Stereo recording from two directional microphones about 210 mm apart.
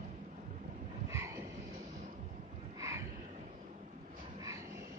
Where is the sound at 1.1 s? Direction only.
15° right (ahead or behind).